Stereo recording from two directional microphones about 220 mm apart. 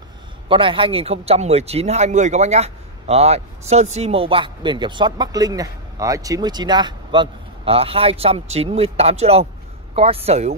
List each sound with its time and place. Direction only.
0.5 s speech: 25° right (ahead or behind)